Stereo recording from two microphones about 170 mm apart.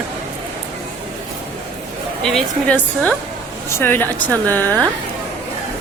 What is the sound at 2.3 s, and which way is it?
Speech, 5° left (ahead or behind).